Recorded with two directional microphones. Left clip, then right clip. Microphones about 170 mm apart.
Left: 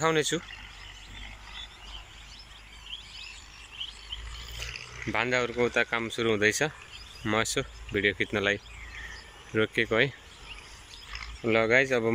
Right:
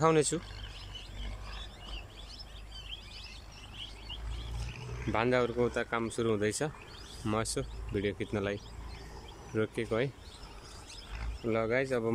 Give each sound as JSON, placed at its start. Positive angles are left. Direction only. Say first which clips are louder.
{"t": 0.0, "sound": "speech", "louder": "left 1 dB", "side_deg": -10}
{"t": 4.7, "sound": "a sound", "louder": "even", "side_deg": -90}
{"t": 5.1, "sound": "speech", "louder": "left 2 dB", "side_deg": -10}
{"t": 11.4, "sound": "speech", "louder": "left 8 dB", "side_deg": -5}